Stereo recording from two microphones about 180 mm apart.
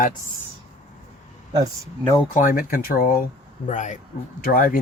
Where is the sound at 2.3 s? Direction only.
50° left (ahead or behind).